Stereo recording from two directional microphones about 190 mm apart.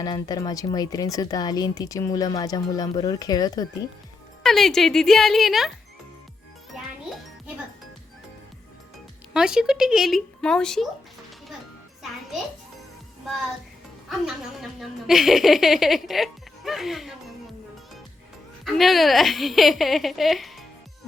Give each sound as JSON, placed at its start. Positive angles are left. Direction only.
{"t": 0.0, "sound": "speech", "side_deg": 20}
{"t": 4.4, "sound": "speech", "side_deg": 0}
{"t": 6.7, "sound": "music", "side_deg": 0}
{"t": 9.3, "sound": "speech", "side_deg": -5}
{"t": 14.6, "sound": "speech", "side_deg": 0}
{"t": 18.6, "sound": "speech", "side_deg": 0}